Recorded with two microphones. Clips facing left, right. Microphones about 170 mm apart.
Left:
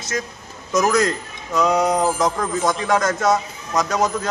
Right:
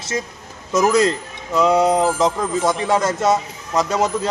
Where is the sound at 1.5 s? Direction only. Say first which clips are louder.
Right 3 dB; 25° right (ahead or behind).